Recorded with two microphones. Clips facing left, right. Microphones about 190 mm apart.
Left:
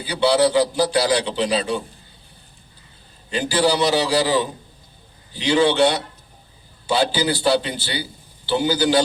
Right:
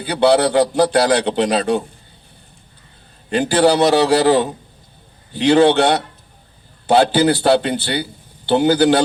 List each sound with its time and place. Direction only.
0.0 s a man's voice: 60° right (ahead or behind)
3.2 s a man's voice: 60° right (ahead or behind)